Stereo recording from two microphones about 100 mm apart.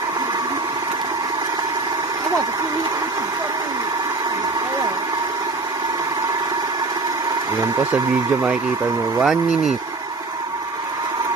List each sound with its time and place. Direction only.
7.8 s speech: 15° right (ahead or behind)
9.2 s speech: centre (ahead or behind)